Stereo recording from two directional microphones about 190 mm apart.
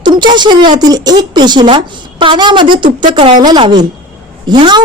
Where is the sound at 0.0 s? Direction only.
25° right (ahead or behind).